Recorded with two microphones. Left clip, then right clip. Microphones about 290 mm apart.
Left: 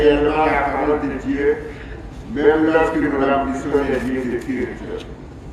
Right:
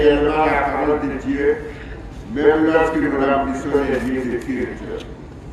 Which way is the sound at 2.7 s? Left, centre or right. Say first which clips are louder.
Even; right.